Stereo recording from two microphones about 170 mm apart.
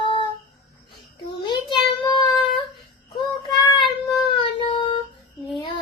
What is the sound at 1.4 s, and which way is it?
Child singing, 25° left (ahead or behind).